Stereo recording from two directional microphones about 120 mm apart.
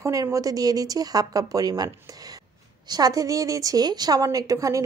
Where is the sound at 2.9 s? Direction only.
35° right (ahead or behind).